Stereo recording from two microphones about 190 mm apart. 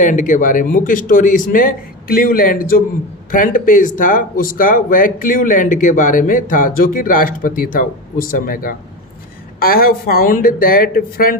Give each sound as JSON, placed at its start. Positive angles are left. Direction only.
{"t": 0.0, "sound": "speech", "side_deg": 40}